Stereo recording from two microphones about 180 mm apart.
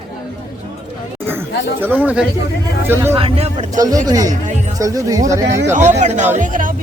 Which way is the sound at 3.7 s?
20° right (ahead or behind).